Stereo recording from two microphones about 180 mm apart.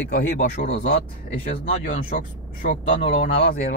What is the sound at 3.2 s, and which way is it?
Speech, 55° left (ahead or behind).